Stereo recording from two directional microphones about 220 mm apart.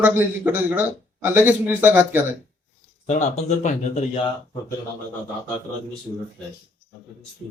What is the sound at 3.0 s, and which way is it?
Speech, 30° left (ahead or behind).